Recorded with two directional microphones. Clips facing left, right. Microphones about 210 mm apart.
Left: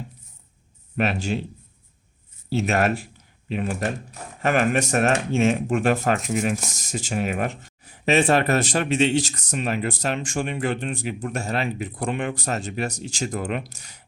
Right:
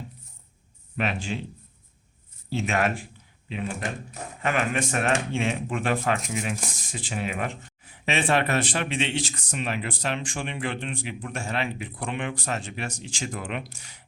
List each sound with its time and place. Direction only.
0.9 s speech: 40° left (ahead or behind)
2.5 s speech: 40° left (ahead or behind)